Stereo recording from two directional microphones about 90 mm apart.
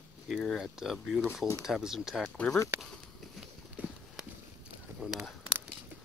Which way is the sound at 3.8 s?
15° right (ahead or behind).